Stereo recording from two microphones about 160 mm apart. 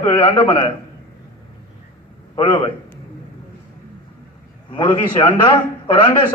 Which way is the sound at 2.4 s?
30° left (ahead or behind).